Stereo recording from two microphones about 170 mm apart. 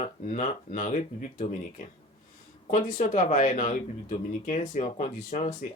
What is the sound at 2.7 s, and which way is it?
Speech, 50° left (ahead or behind).